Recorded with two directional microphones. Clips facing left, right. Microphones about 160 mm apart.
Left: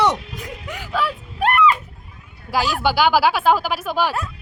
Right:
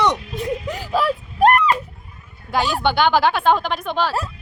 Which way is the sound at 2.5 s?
5° left (ahead or behind).